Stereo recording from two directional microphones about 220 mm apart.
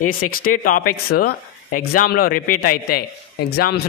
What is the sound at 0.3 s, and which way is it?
Speech, 40° left (ahead or behind).